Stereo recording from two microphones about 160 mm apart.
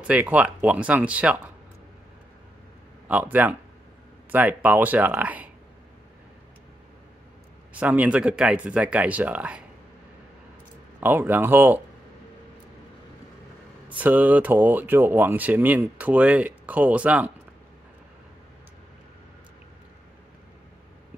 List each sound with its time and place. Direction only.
0.0 s speech: 10° right (ahead or behind)
3.1 s speech: 10° right (ahead or behind)
7.7 s speech: 10° right (ahead or behind)
11.0 s speech: 10° right (ahead or behind)
13.8 s speech: 10° right (ahead or behind)